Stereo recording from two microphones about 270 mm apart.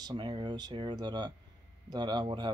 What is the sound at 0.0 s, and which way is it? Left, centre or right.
Speech, centre.